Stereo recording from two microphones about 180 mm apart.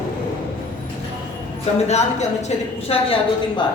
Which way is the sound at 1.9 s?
40° left (ahead or behind).